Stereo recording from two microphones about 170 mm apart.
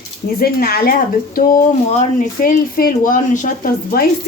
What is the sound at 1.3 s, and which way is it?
Speech, 45° left (ahead or behind).